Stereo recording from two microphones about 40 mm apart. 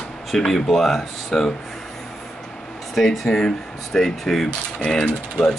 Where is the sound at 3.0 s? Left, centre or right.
Centre.